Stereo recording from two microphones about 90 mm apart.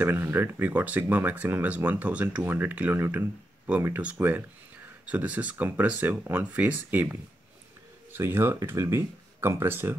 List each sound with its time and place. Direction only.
0.0 s speech: 25° right (ahead or behind)